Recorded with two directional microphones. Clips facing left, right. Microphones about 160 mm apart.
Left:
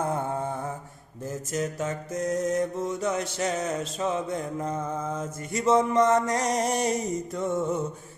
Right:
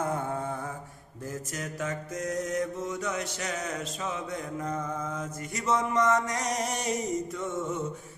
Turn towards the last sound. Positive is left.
turn(degrees=35)  # may be behind; listen again after turning